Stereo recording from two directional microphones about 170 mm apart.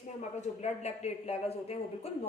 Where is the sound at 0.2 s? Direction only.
40° left (ahead or behind).